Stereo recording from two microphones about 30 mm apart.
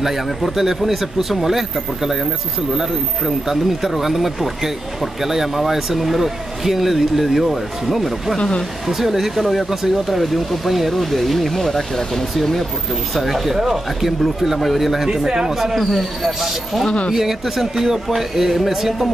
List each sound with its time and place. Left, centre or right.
0.0 s speech: centre
2.7 s speech: centre
8.4 s speech: left
8.8 s speech: centre
9.4 s speech: centre
9.7 s speech: centre
13.2 s speech: centre
15.0 s speech: right
15.8 s speech: centre